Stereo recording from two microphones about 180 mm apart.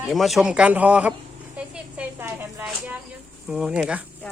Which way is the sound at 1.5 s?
5° right (ahead or behind).